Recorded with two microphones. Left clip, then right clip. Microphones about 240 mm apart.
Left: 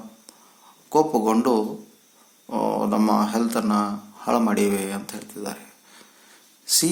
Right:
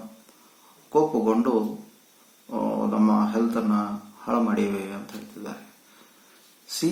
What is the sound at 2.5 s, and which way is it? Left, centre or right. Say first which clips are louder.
Speech: left 4 dB; left.